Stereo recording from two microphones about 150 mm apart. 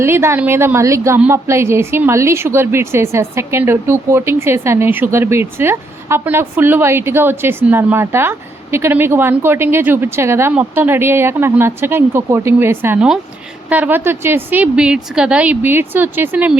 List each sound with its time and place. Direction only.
0.0 s a woman's voice: 15° right (ahead or behind)